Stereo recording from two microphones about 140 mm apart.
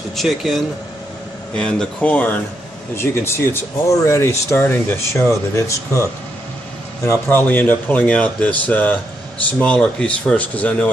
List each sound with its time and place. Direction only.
0.1 s speech: centre (ahead or behind)
3.5 s speech: 20° left (ahead or behind)
7.1 s speech: 15° left (ahead or behind)